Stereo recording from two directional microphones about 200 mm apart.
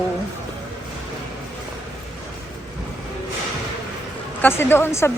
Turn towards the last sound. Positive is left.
turn(degrees=10)  # may be behind; listen again after turning